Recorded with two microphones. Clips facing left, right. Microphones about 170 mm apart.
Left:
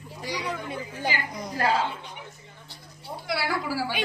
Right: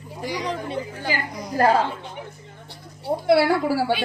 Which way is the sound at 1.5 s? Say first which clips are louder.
Right 7 dB; 50° right (ahead or behind).